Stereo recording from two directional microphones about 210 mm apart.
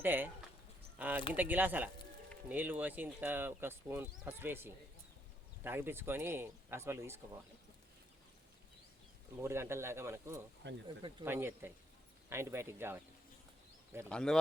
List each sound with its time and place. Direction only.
0.0 s speech: 10° right (ahead or behind)
9.4 s speech: 10° right (ahead or behind)
11.3 s speech: 10° right (ahead or behind)
14.1 s speech: 5° left (ahead or behind)